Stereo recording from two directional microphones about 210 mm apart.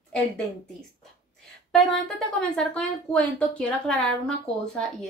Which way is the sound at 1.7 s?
Centre (ahead or behind).